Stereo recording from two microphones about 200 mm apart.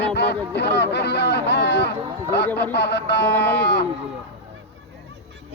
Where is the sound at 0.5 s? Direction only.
60° left (ahead or behind).